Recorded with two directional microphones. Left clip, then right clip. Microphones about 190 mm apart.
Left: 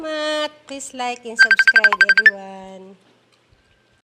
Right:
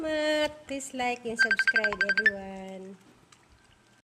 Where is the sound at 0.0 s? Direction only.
5° right (ahead or behind).